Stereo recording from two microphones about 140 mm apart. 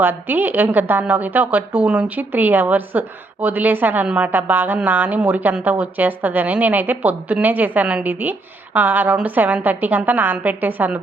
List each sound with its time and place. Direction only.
0.0 s a woman's voice: 15° right (ahead or behind)